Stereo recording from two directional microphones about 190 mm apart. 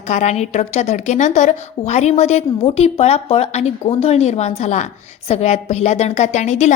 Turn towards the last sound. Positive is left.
turn(degrees=35)  # may be behind; listen again after turning